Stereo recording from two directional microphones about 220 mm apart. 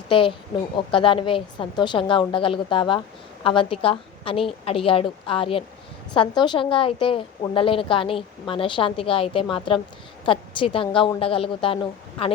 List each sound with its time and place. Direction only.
0.1 s a woman's voice: 25° left (ahead or behind)